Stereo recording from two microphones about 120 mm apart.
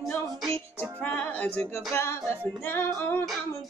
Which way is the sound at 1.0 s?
10° left (ahead or behind).